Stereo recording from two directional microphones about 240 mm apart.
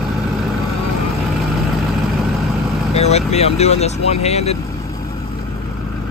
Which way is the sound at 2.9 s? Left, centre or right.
Left.